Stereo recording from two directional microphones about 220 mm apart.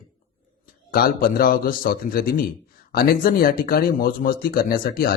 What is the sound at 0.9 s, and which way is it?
A man's voice, 40° left (ahead or behind).